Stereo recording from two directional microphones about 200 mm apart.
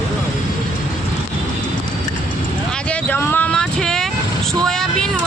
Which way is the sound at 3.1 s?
10° left (ahead or behind).